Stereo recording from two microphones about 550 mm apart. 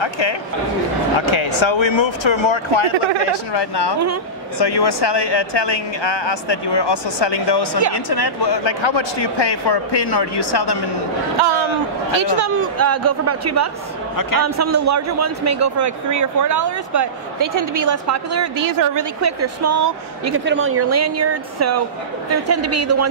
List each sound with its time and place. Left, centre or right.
0.0 s speech: left
3.5 s speech: left
12.2 s a woman's voice: right